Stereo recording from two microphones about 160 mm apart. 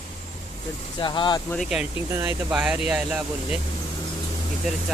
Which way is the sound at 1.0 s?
30° left (ahead or behind).